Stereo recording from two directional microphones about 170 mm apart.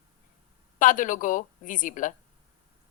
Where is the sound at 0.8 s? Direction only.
50° left (ahead or behind).